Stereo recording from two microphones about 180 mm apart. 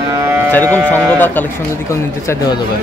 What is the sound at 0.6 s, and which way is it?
Speech, 15° right (ahead or behind).